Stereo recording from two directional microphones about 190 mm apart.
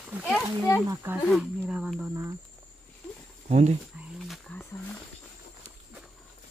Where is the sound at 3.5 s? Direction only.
35° right (ahead or behind).